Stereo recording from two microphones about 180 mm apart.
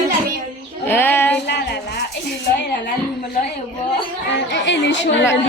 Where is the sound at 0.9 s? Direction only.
10° left (ahead or behind).